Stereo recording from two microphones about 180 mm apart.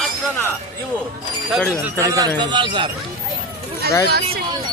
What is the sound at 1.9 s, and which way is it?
Speech, 15° right (ahead or behind).